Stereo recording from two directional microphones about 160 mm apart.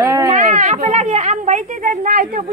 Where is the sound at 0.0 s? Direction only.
20° right (ahead or behind).